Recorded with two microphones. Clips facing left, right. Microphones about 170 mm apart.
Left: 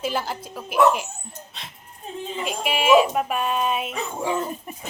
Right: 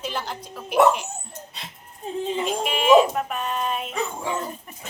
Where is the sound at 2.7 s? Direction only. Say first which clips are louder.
Right 1 dB; 10° left (ahead or behind).